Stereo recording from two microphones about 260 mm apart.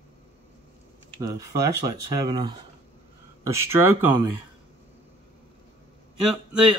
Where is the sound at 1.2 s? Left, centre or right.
Centre.